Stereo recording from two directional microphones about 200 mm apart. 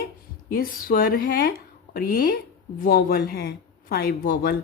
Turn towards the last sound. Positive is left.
turn(degrees=45)  # may be behind; listen again after turning